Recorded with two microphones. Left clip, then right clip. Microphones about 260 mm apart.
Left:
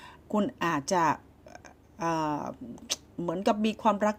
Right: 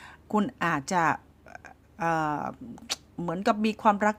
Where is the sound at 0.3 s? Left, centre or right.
Right.